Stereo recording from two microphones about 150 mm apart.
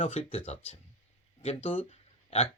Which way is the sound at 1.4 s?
45° left (ahead or behind).